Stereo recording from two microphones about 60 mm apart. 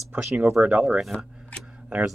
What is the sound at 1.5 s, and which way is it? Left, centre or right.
Tick, left.